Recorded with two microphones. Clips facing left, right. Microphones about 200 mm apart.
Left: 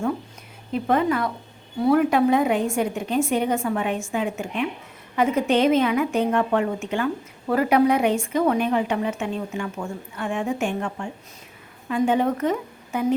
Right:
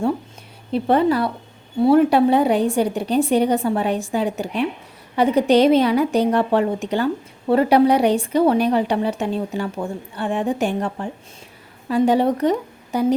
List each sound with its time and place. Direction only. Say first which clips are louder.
0.7 s a woman's voice: right 4 dB; 30° right (ahead or behind)